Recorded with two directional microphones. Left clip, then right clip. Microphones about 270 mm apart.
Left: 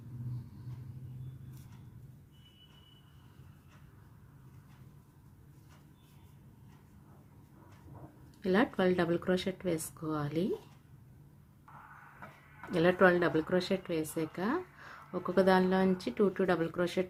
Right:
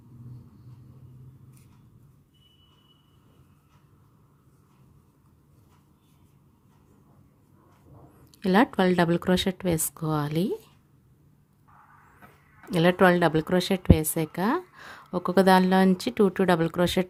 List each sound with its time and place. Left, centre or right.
8.4 s a woman's voice: right
12.7 s a woman's voice: right